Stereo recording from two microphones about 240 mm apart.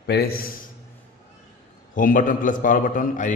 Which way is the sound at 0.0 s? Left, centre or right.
Left.